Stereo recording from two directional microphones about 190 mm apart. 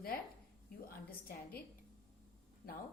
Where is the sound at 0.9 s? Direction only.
50° left (ahead or behind).